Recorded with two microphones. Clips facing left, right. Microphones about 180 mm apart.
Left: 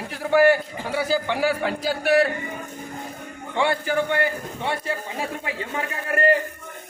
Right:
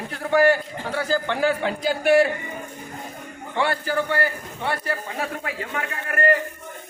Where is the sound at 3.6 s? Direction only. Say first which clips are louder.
Left 1 dB; 15° left (ahead or behind).